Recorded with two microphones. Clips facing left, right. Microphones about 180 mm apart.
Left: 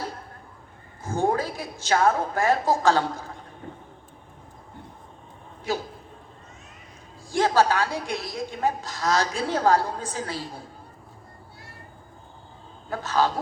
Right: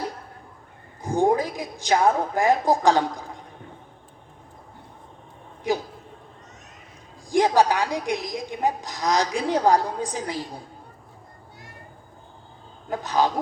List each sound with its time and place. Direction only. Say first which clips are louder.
1.0 s a woman's voice: right 4 dB; 15° right (ahead or behind)
5.7 s a woman's voice: right 4 dB; 15° right (ahead or behind)
7.3 s a woman's voice: right 2 dB; 15° right (ahead or behind)
12.9 s a woman's voice: right 1 dB; 15° right (ahead or behind)